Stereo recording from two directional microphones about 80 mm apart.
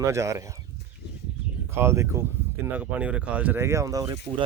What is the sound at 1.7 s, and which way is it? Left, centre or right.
Speech, right.